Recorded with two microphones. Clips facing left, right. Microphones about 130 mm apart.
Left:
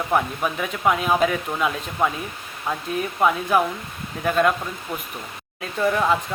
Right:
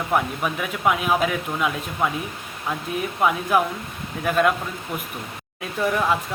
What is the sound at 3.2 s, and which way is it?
Speech, 5° right (ahead or behind).